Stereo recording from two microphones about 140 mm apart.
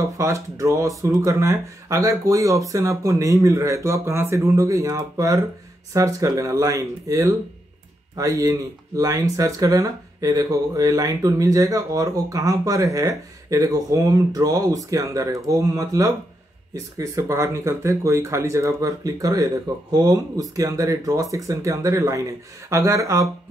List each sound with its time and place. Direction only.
0.0 s speech: 20° right (ahead or behind)